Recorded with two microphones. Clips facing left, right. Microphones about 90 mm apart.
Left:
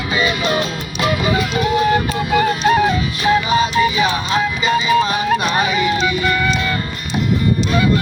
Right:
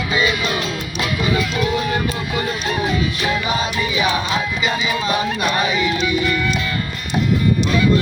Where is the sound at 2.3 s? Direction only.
55° left (ahead or behind).